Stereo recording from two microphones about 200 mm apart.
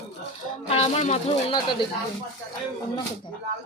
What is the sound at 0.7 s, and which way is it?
Speech, 30° left (ahead or behind).